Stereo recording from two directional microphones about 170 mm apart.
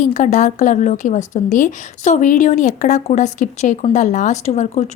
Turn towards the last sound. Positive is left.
turn(degrees=40)  # may be behind; listen again after turning